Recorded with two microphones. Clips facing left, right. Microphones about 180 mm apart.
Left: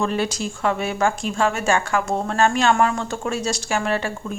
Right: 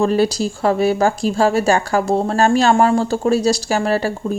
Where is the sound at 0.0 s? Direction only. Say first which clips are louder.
Right 7 dB; 35° right (ahead or behind).